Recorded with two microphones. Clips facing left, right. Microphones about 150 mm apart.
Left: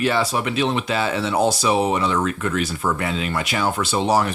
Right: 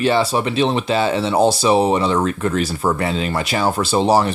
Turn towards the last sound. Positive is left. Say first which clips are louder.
# right 4 dB
turn(degrees=-30)  # may be behind; listen again after turning